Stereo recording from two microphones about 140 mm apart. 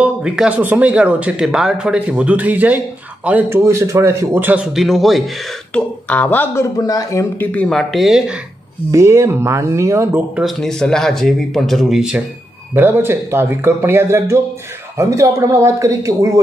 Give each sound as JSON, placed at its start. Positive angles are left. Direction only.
{"t": 0.0, "sound": "speech", "side_deg": -5}
{"t": 4.7, "sound": "speech", "side_deg": 0}
{"t": 7.5, "sound": "speech", "side_deg": 5}
{"t": 8.9, "sound": "speech", "side_deg": -20}
{"t": 10.3, "sound": "speech", "side_deg": 0}
{"t": 12.7, "sound": "speech", "side_deg": -15}